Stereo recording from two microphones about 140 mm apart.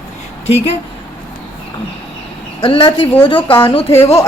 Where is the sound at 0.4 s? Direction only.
45° left (ahead or behind).